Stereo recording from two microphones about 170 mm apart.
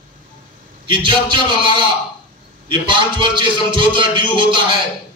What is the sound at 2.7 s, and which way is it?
A man's voice, 30° right (ahead or behind).